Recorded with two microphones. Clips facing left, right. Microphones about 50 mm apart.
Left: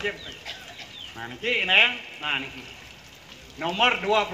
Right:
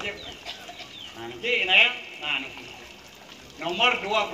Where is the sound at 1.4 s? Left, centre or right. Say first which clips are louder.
Even; centre.